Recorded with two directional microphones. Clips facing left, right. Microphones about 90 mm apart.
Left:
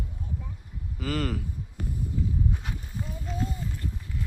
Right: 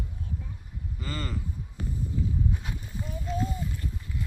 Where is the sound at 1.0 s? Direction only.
70° left (ahead or behind).